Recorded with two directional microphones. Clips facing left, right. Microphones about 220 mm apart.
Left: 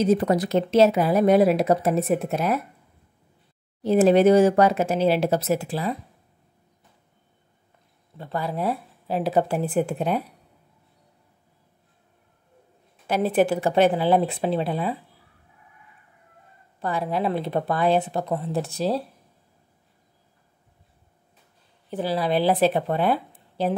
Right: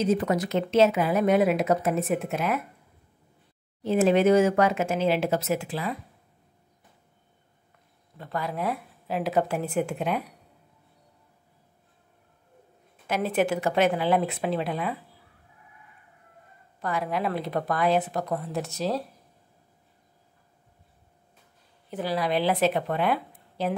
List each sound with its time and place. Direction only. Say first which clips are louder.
0.0 s a woman's voice: left 4 dB; 35° left (ahead or behind)
3.8 s a woman's voice: left 4 dB; 35° left (ahead or behind)
8.2 s a woman's voice: left 3 dB; 30° left (ahead or behind)
13.0 s a woman's voice: left 4 dB; 35° left (ahead or behind)
16.8 s speech: left 3 dB; 30° left (ahead or behind)
21.9 s a woman's voice: left 3 dB; 30° left (ahead or behind)